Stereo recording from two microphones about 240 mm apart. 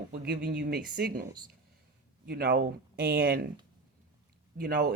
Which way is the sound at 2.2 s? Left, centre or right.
Right.